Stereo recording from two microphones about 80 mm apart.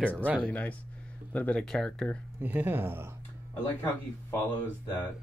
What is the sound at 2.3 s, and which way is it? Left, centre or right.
Speech, right.